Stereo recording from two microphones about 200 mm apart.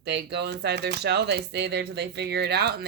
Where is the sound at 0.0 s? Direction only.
55° right (ahead or behind).